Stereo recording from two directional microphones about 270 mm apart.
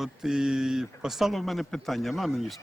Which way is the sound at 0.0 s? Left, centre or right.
Centre.